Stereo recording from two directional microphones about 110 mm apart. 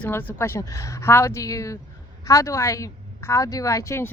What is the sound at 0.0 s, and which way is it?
A woman's voice, 15° left (ahead or behind).